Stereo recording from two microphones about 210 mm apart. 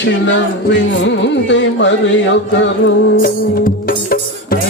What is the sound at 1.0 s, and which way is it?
Carnatic music, 60° left (ahead or behind).